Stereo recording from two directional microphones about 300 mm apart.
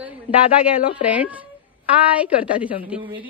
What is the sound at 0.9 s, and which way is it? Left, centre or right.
A woman's voice, centre.